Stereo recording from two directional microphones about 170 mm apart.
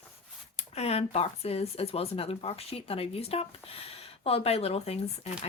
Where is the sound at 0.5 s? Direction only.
40° left (ahead or behind).